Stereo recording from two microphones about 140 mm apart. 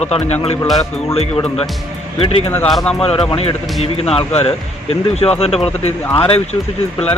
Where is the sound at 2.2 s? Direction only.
40° left (ahead or behind).